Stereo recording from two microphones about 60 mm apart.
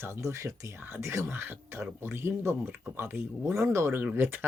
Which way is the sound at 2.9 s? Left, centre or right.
Right.